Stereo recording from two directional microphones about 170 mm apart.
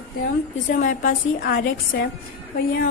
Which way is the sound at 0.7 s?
50° left (ahead or behind).